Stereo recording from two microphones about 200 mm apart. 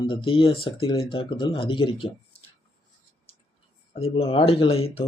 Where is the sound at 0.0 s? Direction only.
25° left (ahead or behind).